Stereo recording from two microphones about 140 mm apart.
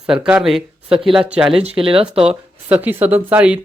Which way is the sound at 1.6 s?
40° right (ahead or behind).